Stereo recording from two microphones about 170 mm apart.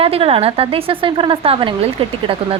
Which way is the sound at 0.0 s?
35° right (ahead or behind).